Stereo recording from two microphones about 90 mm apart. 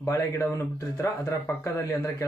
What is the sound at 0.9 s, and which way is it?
Speech, 35° left (ahead or behind).